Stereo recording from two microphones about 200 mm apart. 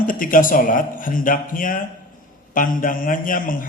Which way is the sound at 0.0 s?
40° left (ahead or behind).